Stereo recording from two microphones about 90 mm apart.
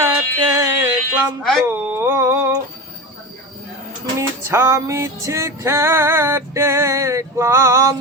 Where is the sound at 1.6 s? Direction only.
30° right (ahead or behind).